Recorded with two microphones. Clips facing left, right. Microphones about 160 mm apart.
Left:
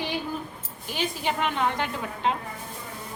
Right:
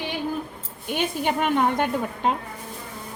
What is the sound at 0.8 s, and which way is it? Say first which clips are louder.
A woman's voice: right 4 dB; 55° right (ahead or behind).